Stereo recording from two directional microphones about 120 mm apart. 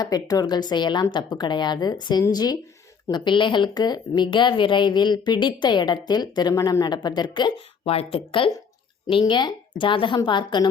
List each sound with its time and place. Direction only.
0.0 s a woman's voice: 30° left (ahead or behind)